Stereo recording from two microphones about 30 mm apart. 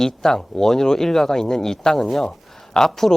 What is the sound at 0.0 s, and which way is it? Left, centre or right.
Speech, centre.